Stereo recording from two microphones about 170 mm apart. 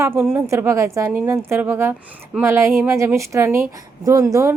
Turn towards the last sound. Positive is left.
turn(degrees=-20)  # may be behind; listen again after turning